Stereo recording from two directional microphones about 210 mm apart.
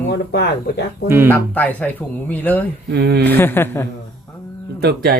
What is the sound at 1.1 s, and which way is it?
Speech, 10° right (ahead or behind).